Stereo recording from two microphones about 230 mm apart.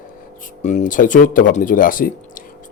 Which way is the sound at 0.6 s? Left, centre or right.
Left.